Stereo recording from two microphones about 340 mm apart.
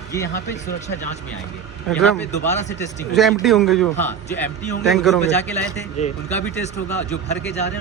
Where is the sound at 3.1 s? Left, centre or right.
Centre.